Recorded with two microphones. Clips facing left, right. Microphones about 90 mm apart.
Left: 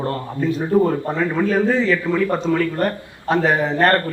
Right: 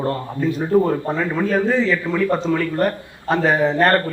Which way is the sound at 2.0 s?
15° left (ahead or behind).